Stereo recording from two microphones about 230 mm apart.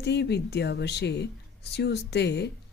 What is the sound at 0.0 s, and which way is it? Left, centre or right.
Speech, left.